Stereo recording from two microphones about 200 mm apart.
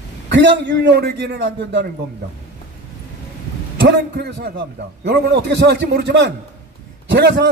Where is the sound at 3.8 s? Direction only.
60° right (ahead or behind).